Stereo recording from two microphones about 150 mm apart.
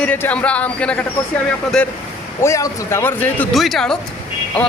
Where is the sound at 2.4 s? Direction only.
20° left (ahead or behind).